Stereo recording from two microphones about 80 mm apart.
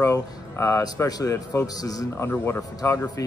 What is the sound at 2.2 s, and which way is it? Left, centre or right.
Speech, left.